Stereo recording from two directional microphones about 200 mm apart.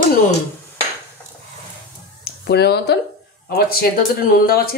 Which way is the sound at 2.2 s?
55° left (ahead or behind).